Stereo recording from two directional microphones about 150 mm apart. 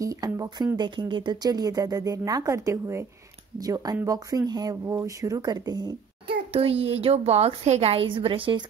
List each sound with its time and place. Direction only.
0.0 s speech: 25° right (ahead or behind)
6.5 s a woman's voice: 40° right (ahead or behind)